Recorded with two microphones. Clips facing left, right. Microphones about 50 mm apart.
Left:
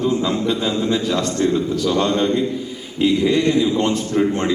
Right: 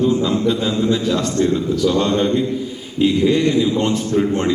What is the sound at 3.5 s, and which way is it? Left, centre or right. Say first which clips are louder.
A man's voice: even; left.